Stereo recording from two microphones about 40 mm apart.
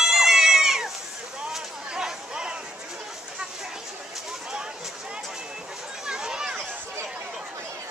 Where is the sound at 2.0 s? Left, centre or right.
Centre.